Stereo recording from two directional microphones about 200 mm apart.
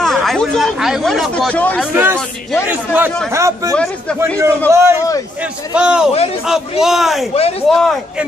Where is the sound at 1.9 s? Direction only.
10° right (ahead or behind).